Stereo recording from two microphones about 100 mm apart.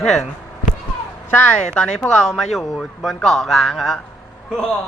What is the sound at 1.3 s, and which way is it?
Speech, 10° left (ahead or behind).